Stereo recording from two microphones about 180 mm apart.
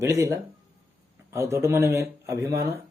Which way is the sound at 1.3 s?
15° right (ahead or behind).